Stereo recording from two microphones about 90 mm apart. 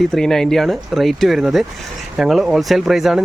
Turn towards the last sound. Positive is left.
turn(degrees=-5)  # may be behind; listen again after turning